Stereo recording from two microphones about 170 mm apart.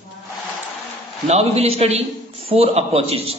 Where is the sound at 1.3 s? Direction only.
35° right (ahead or behind).